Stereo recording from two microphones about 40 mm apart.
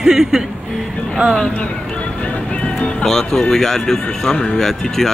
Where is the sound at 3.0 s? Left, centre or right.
Centre.